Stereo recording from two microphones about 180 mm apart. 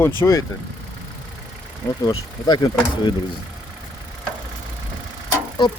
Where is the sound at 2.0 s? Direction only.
20° left (ahead or behind).